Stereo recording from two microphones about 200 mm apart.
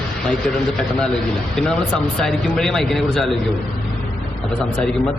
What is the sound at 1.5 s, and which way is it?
Speech, 5° left (ahead or behind).